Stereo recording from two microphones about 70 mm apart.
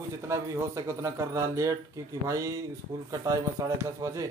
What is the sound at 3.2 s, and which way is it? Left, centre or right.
Speech, right.